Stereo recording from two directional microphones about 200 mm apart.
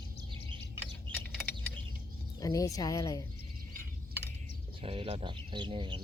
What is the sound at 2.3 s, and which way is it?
Speech, 15° left (ahead or behind).